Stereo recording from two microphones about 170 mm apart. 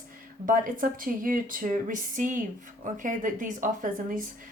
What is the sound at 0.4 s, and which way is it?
A woman's voice, 55° right (ahead or behind).